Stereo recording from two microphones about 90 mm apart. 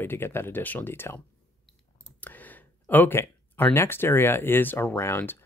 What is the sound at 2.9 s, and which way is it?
Speech, 25° left (ahead or behind).